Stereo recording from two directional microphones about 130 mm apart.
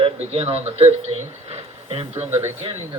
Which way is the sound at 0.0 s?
55° right (ahead or behind).